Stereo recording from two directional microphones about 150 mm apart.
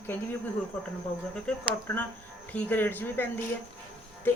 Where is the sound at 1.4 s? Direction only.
10° left (ahead or behind).